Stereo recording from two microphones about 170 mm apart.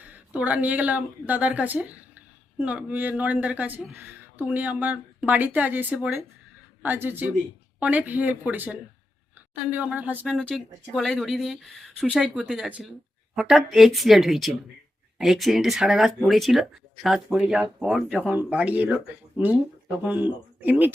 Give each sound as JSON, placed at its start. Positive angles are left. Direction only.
{"t": 0.0, "sound": "speech", "side_deg": -10}
{"t": 10.2, "sound": "speech", "side_deg": 5}
{"t": 20.1, "sound": "speech", "side_deg": -10}